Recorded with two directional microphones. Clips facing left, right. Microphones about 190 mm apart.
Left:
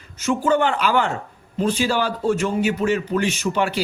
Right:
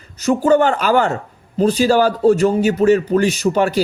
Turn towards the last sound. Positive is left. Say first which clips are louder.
# right 6 dB
turn(degrees=-40)  # may be behind; listen again after turning